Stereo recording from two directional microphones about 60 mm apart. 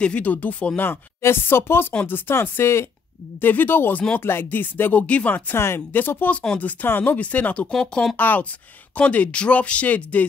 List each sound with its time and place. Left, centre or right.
0.0 s speech: left
1.2 s speech: left
3.3 s speech: left
5.0 s speech: left
5.6 s speech: left